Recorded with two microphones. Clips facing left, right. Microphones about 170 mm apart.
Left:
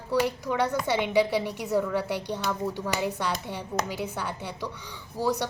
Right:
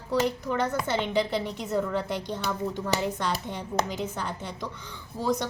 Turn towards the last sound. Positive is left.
turn(degrees=10)  # may be behind; listen again after turning